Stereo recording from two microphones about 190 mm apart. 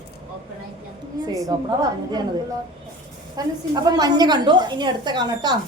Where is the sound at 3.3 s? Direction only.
20° right (ahead or behind).